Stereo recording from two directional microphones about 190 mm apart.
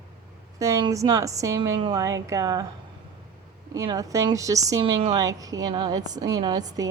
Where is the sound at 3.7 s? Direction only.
15° right (ahead or behind).